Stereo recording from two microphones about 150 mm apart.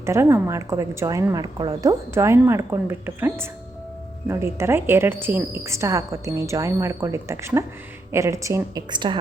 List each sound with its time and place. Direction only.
0.0 s a woman's voice: 15° right (ahead or behind)